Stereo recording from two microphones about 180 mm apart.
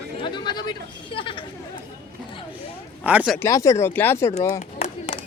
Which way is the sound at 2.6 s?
10° right (ahead or behind).